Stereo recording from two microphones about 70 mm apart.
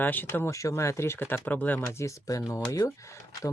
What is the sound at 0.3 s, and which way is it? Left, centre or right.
Speech, left.